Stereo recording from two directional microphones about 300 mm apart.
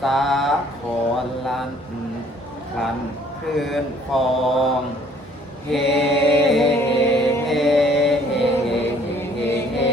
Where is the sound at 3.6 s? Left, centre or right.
Centre.